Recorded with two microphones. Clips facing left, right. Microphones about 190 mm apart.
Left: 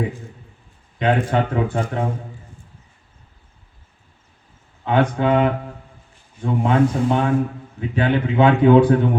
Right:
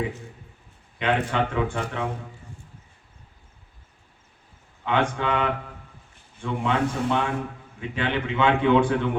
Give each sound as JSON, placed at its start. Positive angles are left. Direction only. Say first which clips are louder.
{"t": 0.9, "sound": "a man's voice", "louder": "left 5 dB", "side_deg": 35}
{"t": 4.9, "sound": "a man's voice", "louder": "left 6 dB", "side_deg": 40}